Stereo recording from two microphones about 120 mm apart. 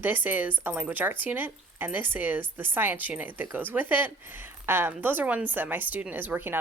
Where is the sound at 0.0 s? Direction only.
15° right (ahead or behind).